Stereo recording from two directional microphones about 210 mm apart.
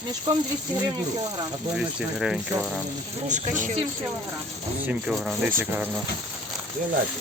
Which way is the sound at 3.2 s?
35° right (ahead or behind).